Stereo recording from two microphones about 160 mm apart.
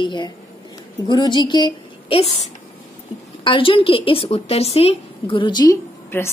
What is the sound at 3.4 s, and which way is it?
A woman's voice, 35° left (ahead or behind).